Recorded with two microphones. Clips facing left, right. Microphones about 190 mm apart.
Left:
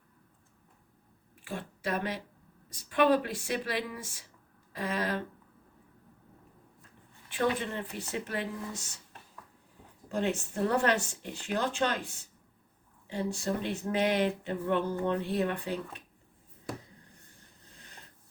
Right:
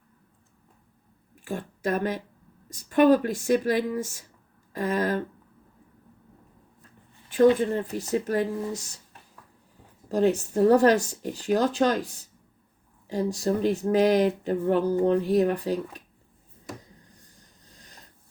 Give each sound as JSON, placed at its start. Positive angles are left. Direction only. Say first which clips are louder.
{"t": 1.5, "sound": "speech", "louder": "right 6 dB", "side_deg": -45}
{"t": 7.4, "sound": "speech", "louder": "right 11 dB", "side_deg": -40}
{"t": 10.1, "sound": "speech", "louder": "right 9 dB", "side_deg": -40}
{"t": 17.7, "sound": "a sound", "louder": "right 1 dB", "side_deg": -35}